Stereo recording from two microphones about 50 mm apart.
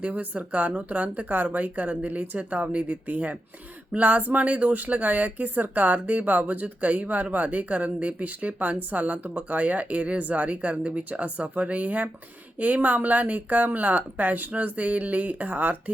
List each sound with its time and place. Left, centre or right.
0.0 s speech: right